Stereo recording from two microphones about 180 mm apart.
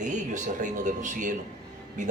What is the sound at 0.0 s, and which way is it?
Speech, 40° right (ahead or behind).